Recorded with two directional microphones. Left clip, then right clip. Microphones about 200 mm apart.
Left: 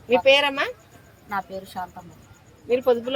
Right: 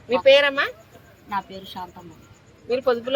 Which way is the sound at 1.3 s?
20° left (ahead or behind).